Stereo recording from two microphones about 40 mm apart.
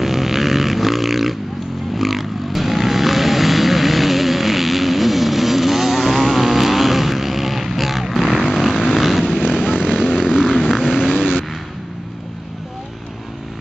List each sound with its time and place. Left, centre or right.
0.0 s a sound: centre
8.5 s vehicle: centre
9.2 s vehicle: centre